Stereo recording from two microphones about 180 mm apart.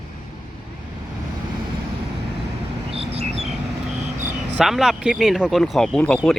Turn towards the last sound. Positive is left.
turn(degrees=5)  # may be behind; listen again after turning